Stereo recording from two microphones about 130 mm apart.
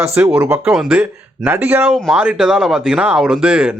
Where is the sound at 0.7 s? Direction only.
5° right (ahead or behind).